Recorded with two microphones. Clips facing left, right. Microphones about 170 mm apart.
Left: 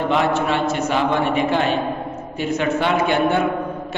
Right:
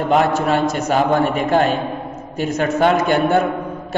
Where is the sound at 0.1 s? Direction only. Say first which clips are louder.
Right 5 dB; 40° right (ahead or behind).